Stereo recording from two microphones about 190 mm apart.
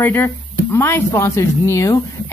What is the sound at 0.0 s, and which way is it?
Speech, 10° left (ahead or behind).